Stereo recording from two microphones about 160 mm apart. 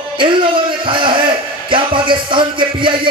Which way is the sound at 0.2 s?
30° right (ahead or behind).